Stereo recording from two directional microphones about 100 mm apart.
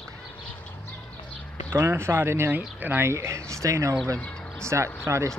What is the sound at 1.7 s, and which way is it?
Speech, 25° right (ahead or behind).